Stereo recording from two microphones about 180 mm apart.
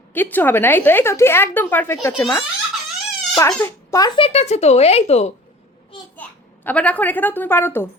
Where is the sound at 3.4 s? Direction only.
15° left (ahead or behind).